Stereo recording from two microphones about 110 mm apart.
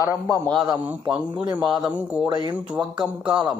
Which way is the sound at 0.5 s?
10° right (ahead or behind).